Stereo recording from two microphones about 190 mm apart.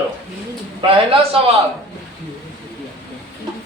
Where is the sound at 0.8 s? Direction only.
30° right (ahead or behind).